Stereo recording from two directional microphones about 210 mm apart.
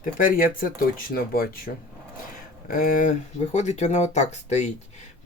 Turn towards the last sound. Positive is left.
turn(degrees=35)  # may be behind; listen again after turning